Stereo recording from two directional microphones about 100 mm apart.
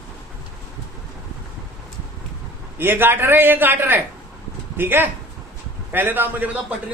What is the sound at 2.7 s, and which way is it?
A man's voice, 20° right (ahead or behind).